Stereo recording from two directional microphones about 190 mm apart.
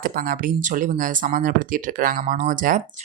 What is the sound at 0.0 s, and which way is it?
Speech, 45° right (ahead or behind).